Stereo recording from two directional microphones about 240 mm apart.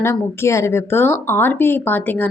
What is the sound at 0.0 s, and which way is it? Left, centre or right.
Speech, centre.